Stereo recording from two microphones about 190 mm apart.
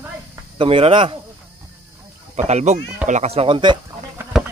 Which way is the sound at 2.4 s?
35° right (ahead or behind).